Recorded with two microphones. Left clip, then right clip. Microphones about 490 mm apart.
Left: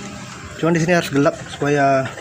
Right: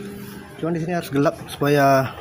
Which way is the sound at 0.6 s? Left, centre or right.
Right.